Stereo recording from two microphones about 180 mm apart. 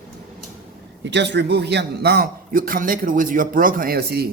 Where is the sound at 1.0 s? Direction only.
75° right (ahead or behind).